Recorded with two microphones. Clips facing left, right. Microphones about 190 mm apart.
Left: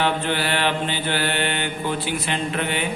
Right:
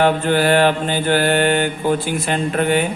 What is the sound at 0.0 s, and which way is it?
Speech, 45° right (ahead or behind).